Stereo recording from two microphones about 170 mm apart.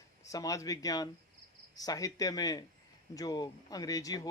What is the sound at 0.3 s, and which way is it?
Speech, 20° left (ahead or behind).